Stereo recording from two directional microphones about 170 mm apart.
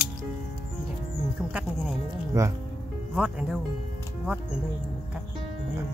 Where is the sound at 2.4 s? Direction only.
20° right (ahead or behind).